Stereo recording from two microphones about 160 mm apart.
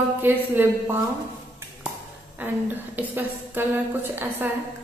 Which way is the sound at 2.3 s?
10° right (ahead or behind).